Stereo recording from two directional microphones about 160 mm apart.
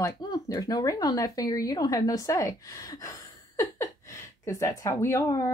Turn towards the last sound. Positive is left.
turn(degrees=20)  # may be behind; listen again after turning